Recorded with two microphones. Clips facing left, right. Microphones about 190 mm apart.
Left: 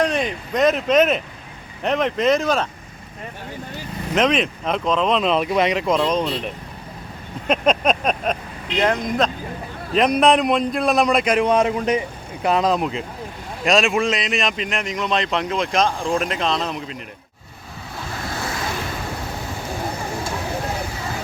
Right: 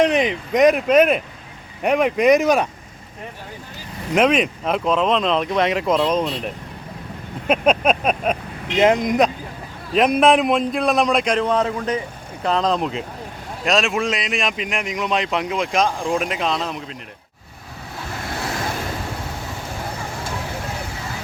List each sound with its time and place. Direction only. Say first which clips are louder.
0.0 s a man's voice: right 4 dB; 15° right (ahead or behind)
4.1 s a man's voice: right 2 dB; 10° right (ahead or behind)
8.8 s speech: right 4 dB; 20° right (ahead or behind)
9.9 s speech: right 1 dB; centre (ahead or behind)
11.4 s a man's voice: left 2 dB; 15° left (ahead or behind); by 17.0 s centre (ahead or behind)